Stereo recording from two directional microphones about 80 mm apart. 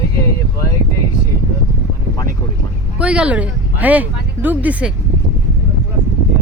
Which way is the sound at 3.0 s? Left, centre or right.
Centre.